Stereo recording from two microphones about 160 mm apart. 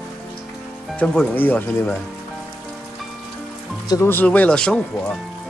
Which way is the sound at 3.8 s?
15° left (ahead or behind).